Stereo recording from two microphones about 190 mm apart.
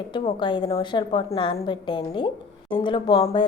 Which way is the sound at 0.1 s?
25° left (ahead or behind).